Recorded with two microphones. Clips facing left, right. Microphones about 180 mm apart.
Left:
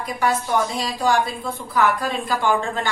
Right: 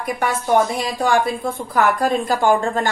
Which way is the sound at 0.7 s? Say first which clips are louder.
Right 2 dB; 50° right (ahead or behind).